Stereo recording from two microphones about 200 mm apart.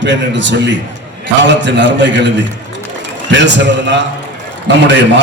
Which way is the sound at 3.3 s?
65° right (ahead or behind).